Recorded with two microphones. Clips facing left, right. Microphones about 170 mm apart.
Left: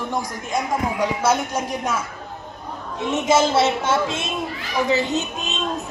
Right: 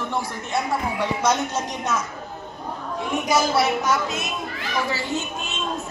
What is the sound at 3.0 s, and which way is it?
A woman's voice, 20° left (ahead or behind).